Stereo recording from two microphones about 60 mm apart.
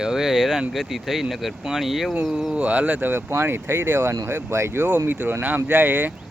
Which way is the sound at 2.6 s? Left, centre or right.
Right.